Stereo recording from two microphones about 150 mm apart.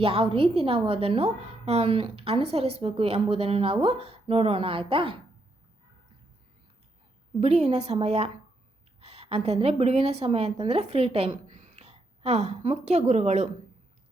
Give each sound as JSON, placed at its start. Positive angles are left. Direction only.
{"t": 0.0, "sound": "a woman's voice", "side_deg": -40}
{"t": 7.3, "sound": "a woman's voice", "side_deg": -45}